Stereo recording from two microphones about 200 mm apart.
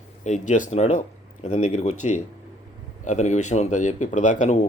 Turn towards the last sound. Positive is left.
turn(degrees=35)  # may be behind; listen again after turning